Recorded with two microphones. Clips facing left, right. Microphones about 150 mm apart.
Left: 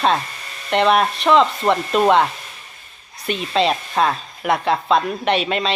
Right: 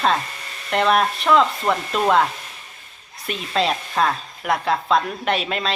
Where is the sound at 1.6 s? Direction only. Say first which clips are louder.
Left 3 dB; 20° left (ahead or behind).